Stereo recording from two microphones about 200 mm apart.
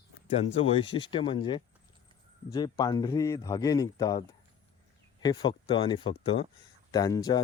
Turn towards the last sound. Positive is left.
turn(degrees=20)  # may be behind; listen again after turning